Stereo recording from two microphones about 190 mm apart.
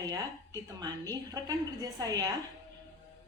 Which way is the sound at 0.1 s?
20° right (ahead or behind).